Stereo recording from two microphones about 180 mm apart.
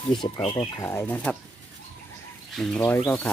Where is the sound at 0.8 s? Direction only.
15° left (ahead or behind).